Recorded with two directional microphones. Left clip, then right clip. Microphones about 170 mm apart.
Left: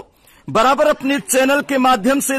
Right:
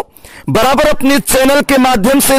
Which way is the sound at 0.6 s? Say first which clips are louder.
Right 3 dB; 45° right (ahead or behind).